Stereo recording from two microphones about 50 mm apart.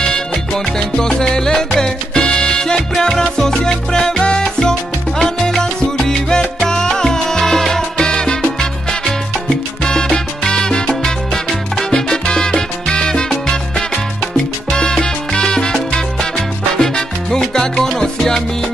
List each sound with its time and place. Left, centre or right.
0.7 s music: centre
5.2 s salsa music: centre